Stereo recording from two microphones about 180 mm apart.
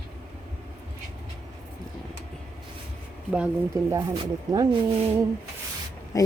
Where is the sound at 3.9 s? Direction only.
20° right (ahead or behind).